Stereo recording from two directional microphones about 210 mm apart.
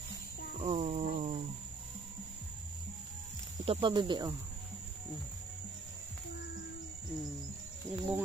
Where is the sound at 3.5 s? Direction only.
25° right (ahead or behind).